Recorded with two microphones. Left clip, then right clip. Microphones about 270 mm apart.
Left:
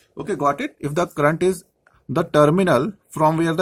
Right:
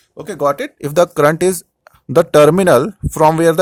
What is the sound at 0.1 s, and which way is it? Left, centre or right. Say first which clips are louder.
Speech: right 4 dB; right.